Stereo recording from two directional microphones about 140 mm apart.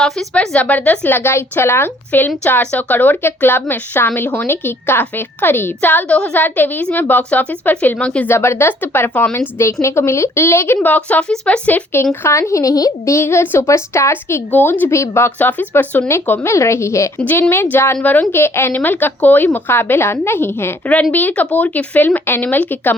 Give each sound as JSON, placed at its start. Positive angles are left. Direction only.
{"t": 0.0, "sound": "speech", "side_deg": 5}